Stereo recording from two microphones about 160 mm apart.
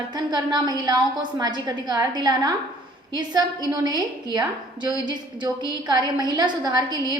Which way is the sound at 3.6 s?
25° right (ahead or behind).